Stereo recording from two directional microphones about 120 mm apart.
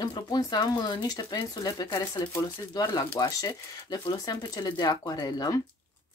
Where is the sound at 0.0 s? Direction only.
35° left (ahead or behind).